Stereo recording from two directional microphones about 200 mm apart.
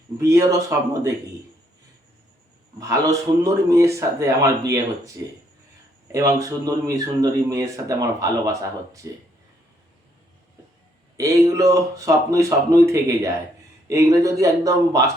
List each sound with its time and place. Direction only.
0.2 s speech: 15° right (ahead or behind)
2.7 s speech: 15° right (ahead or behind)
11.2 s speech: 15° right (ahead or behind)